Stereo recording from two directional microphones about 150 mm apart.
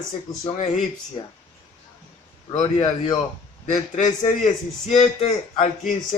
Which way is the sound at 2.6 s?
30° left (ahead or behind).